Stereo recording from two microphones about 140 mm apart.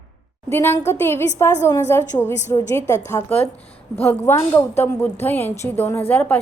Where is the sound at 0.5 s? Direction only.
15° left (ahead or behind).